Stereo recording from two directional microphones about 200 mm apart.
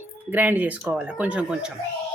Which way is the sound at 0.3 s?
10° right (ahead or behind).